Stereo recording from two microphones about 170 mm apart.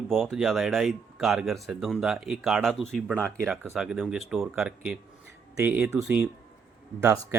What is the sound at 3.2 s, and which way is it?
Speech, 15° right (ahead or behind).